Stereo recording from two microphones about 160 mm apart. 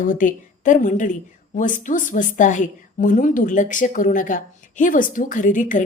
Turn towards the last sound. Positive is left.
turn(degrees=55)  # may be behind; listen again after turning